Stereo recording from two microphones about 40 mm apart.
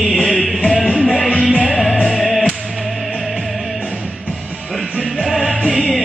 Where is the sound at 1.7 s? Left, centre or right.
Centre.